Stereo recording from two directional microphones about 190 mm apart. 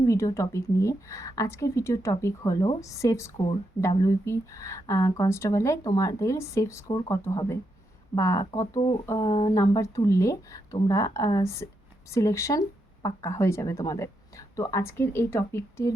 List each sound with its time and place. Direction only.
0.0 s speech: 15° left (ahead or behind)